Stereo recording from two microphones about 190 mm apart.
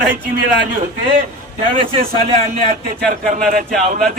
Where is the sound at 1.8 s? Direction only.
30° right (ahead or behind).